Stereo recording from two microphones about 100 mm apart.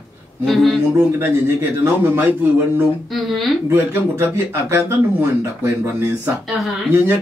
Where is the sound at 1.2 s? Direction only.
25° right (ahead or behind).